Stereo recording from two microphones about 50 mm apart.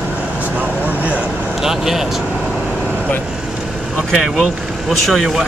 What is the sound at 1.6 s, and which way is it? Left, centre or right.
Speech, centre.